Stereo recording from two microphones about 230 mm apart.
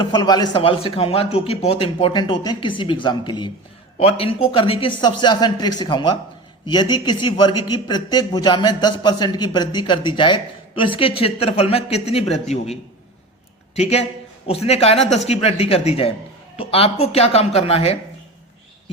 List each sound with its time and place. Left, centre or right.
0.0 s a man's voice: centre
14.4 s a man's voice: left